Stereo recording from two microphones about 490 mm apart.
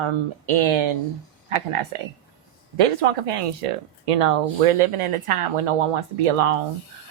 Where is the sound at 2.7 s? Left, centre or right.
Right.